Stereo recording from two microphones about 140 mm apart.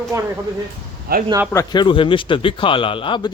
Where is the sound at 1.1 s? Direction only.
90° right.